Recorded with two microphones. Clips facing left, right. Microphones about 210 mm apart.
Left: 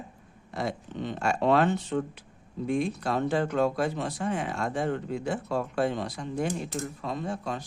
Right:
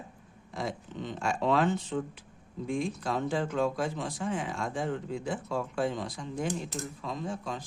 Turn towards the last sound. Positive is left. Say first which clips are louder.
# left 3 dB
turn(degrees=65)  # may be behind; listen again after turning